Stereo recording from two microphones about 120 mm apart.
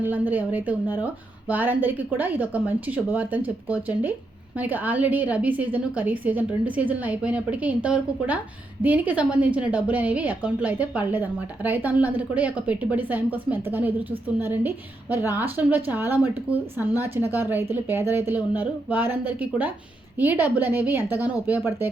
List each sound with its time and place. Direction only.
0.0 s a woman's voice: 15° right (ahead or behind)